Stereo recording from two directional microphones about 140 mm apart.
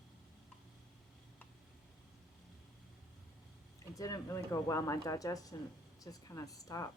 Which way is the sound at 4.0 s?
25° left (ahead or behind).